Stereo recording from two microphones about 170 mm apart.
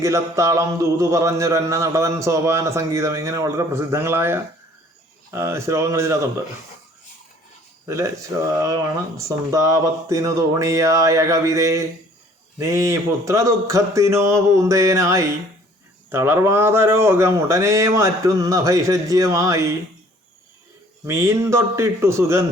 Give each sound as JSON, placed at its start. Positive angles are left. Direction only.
{"t": 0.0, "sound": "speech", "side_deg": -20}
{"t": 7.9, "sound": "speech", "side_deg": -15}
{"t": 21.1, "sound": "speech", "side_deg": -15}